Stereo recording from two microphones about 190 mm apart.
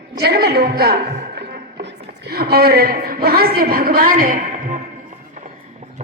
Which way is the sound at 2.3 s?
55° right (ahead or behind).